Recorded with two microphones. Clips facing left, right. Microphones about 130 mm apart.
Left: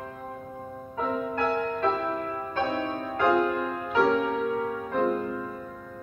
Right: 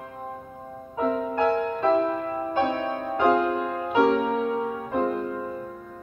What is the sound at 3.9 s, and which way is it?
Music, 20° right (ahead or behind).